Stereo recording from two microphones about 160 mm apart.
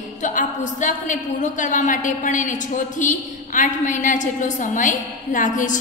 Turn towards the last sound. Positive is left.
turn(degrees=55)  # may be behind; listen again after turning